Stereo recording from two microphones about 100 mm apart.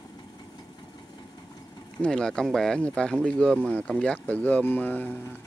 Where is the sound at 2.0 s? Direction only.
10° left (ahead or behind).